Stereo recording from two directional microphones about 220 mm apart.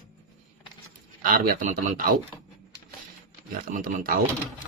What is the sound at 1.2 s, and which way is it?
Speech, 40° right (ahead or behind).